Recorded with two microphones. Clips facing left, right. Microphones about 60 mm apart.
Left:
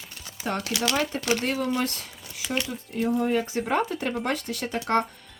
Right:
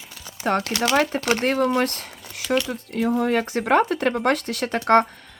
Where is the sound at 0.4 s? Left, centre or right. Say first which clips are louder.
Right 6 dB; right.